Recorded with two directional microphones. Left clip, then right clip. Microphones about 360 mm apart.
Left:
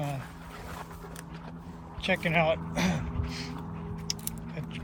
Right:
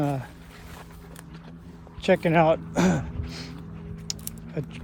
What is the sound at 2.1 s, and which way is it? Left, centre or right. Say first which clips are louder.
Speech: right 6 dB; right.